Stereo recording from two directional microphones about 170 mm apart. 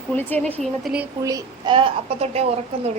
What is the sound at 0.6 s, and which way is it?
Speech, 5° right (ahead or behind).